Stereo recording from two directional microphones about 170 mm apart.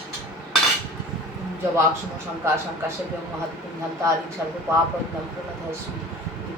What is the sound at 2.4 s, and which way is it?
Speech, 15° right (ahead or behind).